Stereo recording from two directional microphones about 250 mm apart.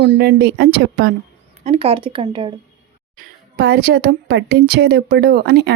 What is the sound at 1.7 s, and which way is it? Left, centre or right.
Speech, right.